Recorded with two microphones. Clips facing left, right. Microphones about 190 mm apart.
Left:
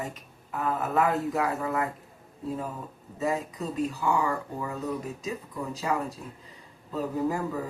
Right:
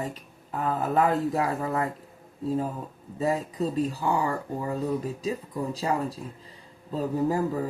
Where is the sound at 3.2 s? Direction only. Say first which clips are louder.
Right 3 dB; 30° right (ahead or behind).